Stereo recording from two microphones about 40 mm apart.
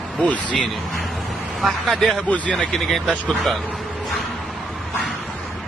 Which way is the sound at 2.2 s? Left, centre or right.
Left.